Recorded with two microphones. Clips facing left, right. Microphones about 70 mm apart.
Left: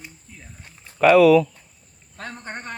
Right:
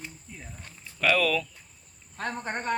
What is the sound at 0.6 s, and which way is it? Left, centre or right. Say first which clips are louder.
Speech: left 11 dB; centre.